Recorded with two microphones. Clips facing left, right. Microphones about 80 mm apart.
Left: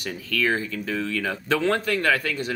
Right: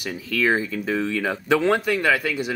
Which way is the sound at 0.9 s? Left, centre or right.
Right.